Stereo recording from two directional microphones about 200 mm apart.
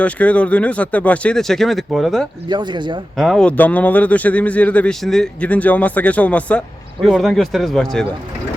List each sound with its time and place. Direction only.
0.0 s speech: 5° left (ahead or behind)
2.5 s speech: 20° right (ahead or behind)
3.2 s speech: centre (ahead or behind)